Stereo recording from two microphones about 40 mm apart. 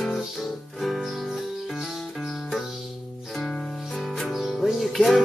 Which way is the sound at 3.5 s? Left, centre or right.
Centre.